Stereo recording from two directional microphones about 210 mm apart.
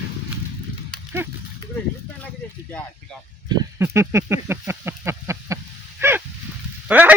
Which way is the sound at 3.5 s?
15° right (ahead or behind).